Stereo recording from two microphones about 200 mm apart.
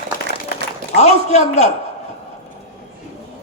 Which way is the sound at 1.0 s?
35° left (ahead or behind).